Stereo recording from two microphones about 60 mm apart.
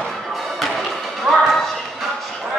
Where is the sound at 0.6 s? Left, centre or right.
Centre.